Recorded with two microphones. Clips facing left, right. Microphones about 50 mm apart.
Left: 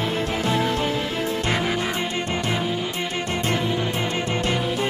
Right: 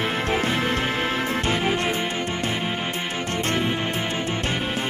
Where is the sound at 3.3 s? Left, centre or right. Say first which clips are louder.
Right 1 dB; right.